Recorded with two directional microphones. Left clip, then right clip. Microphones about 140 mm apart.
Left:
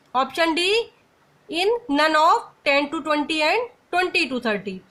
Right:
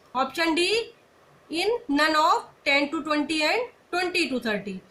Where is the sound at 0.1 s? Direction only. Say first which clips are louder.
Left 4 dB; 50° left (ahead or behind).